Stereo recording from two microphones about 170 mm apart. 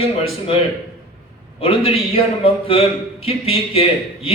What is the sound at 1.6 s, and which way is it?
A man's voice, 35° left (ahead or behind).